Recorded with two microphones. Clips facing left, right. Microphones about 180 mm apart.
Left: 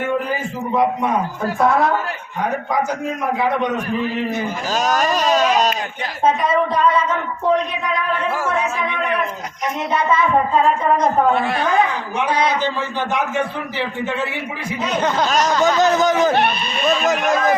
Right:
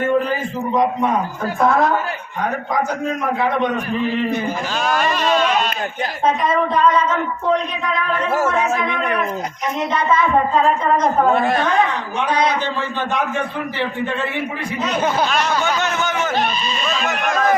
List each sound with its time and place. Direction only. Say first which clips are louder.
0.3 s a sound: right 1 dB; 10° left (ahead or behind)
4.8 s speech: left 2 dB; 40° left (ahead or behind)
8.4 s speech: right 3 dB; 45° right (ahead or behind)
11.3 s speech: right 2 dB; 45° right (ahead or behind)
15.3 s speech: left 3 dB; 40° left (ahead or behind)
16.3 s speech: left 2 dB; 65° left (ahead or behind)